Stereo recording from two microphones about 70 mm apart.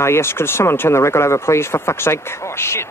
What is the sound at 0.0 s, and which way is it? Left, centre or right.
Speech, left.